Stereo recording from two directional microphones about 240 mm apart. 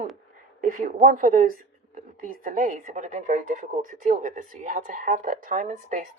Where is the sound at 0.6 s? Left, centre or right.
Right.